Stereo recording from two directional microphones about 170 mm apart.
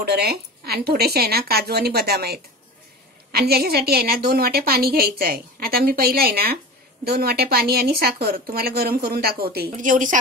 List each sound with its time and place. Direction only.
0.0 s a woman's voice: 70° right (ahead or behind); by 10.1 s 50° right (ahead or behind)